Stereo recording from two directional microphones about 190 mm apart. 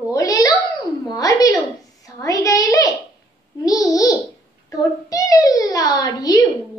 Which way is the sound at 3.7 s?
20° left (ahead or behind).